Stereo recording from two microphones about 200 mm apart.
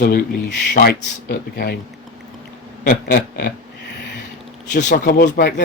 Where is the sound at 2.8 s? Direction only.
55° left (ahead or behind).